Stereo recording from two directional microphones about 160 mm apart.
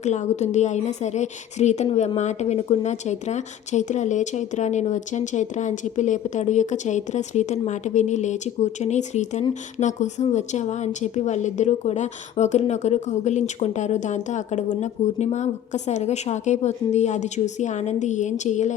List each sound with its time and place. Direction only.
0.0 s a woman's voice: 45° left (ahead or behind)